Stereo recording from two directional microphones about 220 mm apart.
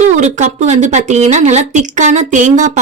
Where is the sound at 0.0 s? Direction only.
30° right (ahead or behind).